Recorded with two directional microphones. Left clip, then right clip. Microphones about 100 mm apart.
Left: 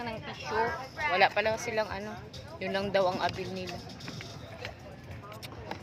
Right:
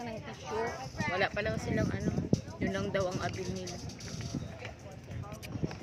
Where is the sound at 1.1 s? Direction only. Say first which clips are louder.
Left 7 dB; 25° right (ahead or behind).